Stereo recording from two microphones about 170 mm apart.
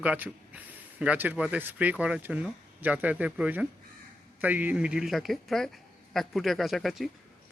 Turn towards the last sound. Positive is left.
turn(degrees=0)  # may be behind; listen again after turning